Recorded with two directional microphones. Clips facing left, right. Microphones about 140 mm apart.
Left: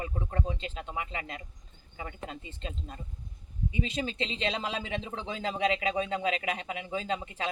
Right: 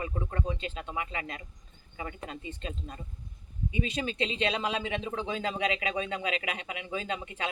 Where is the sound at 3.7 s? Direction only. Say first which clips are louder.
Right 1 dB; 30° left (ahead or behind).